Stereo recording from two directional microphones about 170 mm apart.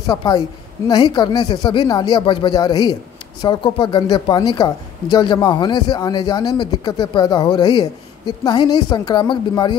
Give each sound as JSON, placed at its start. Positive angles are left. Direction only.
{"t": 0.0, "sound": "speech", "side_deg": 25}